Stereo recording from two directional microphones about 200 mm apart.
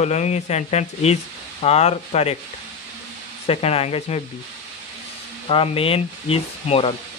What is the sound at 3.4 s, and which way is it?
Speech, 30° left (ahead or behind).